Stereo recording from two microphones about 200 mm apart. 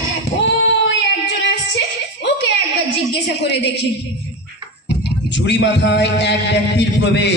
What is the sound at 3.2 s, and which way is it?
A woman's voice, 60° left (ahead or behind).